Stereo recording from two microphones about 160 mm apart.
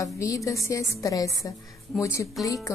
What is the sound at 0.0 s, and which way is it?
Speech, 20° left (ahead or behind).